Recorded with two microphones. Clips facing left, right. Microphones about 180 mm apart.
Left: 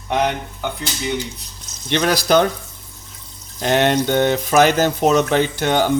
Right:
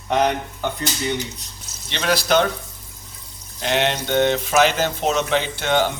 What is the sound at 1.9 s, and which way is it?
Speech, 50° left (ahead or behind).